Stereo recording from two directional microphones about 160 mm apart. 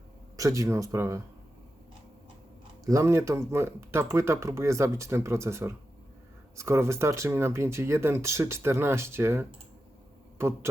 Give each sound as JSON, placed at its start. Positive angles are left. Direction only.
{"t": 0.3, "sound": "speech", "side_deg": -20}
{"t": 2.8, "sound": "speech", "side_deg": -20}